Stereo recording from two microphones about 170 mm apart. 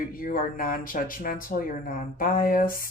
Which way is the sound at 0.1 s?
55° left (ahead or behind).